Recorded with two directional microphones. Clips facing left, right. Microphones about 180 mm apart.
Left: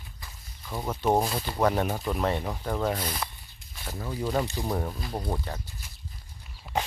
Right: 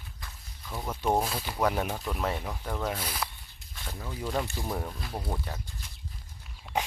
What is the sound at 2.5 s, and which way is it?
Speech, 10° left (ahead or behind).